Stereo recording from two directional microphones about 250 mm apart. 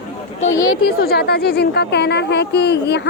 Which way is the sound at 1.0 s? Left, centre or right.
Left.